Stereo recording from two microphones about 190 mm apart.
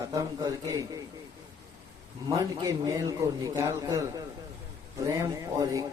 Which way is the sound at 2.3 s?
20° right (ahead or behind).